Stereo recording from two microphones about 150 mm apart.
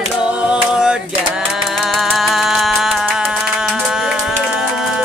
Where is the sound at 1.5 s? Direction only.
Centre (ahead or behind).